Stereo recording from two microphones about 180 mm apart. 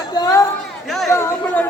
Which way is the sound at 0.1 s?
20° left (ahead or behind).